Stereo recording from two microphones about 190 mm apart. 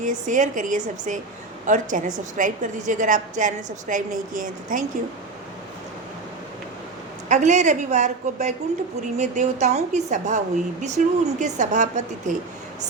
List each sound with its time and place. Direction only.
0.0 s a woman's voice: 40° right (ahead or behind)
7.3 s a woman's voice: 40° right (ahead or behind)